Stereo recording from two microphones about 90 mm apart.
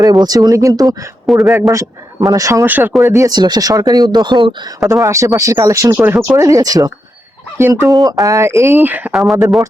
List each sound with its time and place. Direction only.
0.0 s a man's voice: 45° right (ahead or behind)
2.6 s speech: 20° right (ahead or behind)
3.0 s a man's voice: 30° right (ahead or behind)
3.2 s speech: 50° right (ahead or behind)
5.0 s a man's voice: 35° right (ahead or behind)
6.3 s a man's voice: 35° right (ahead or behind); by 9.1 s 20° right (ahead or behind)
9.1 s speech: centre (ahead or behind)